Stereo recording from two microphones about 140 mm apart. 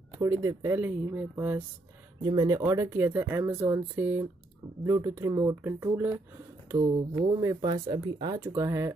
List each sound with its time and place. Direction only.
0.2 s speech: 25° right (ahead or behind)
2.2 s speech: 25° right (ahead or behind)
8.4 s speech: 20° right (ahead or behind)